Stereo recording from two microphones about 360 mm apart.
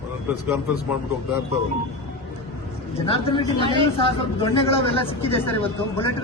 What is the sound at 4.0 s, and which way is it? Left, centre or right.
A woman's voice, centre.